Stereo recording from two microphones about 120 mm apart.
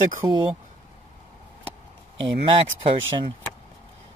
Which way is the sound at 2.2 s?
45° right (ahead or behind).